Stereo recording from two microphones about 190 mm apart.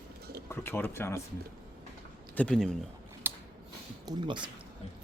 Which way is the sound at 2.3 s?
5° left (ahead or behind).